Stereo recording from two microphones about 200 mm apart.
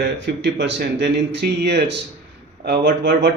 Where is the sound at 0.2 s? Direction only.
60° right (ahead or behind).